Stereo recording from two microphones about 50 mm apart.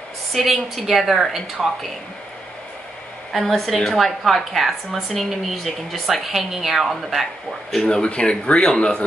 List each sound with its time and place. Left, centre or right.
0.3 s a woman's voice: centre
3.4 s a woman's voice: centre
7.7 s speech: centre